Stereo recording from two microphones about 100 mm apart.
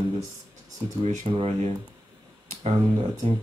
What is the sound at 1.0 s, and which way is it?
Speech, 65° right (ahead or behind).